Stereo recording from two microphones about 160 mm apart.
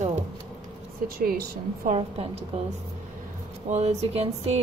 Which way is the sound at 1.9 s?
40° right (ahead or behind).